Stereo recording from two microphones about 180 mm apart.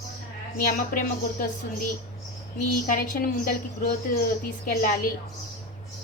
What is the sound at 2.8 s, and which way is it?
A woman's voice, 50° left (ahead or behind).